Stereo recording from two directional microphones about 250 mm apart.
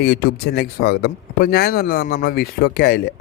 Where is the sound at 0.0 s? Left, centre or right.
Left.